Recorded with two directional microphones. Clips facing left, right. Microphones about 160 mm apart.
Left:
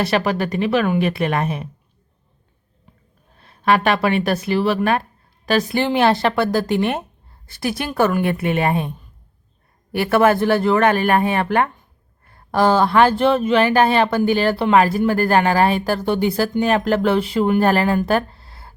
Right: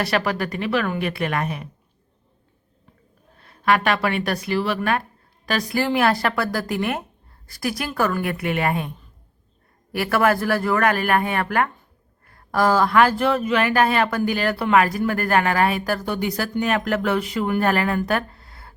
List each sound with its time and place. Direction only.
0.0 s speech: 25° left (ahead or behind)
3.6 s speech: 25° left (ahead or behind)
9.9 s speech: 25° left (ahead or behind)